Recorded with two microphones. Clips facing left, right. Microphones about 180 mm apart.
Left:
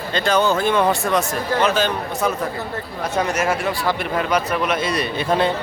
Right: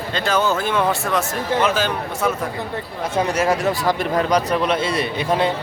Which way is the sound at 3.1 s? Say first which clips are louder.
Right 2 dB; 35° right (ahead or behind).